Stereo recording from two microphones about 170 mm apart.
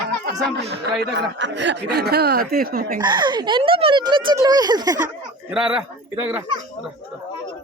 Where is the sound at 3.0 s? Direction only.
25° right (ahead or behind).